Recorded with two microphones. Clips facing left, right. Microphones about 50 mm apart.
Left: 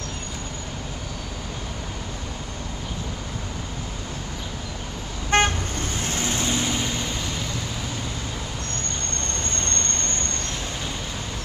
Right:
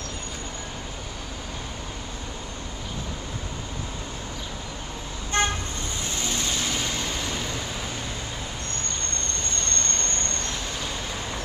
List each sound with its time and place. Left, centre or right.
5.3 s vehicle: left
6.0 s vehicle: left
6.6 s vehicle: centre